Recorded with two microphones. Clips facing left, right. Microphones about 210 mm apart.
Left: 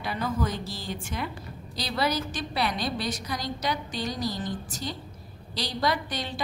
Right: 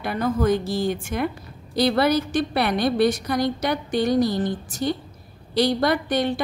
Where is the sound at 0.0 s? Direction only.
55° right (ahead or behind).